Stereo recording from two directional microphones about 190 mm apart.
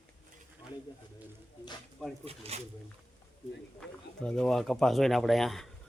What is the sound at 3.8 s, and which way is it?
Speech, 5° left (ahead or behind).